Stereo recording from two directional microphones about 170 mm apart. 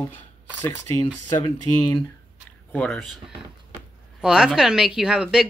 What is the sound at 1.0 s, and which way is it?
Speech, 25° left (ahead or behind).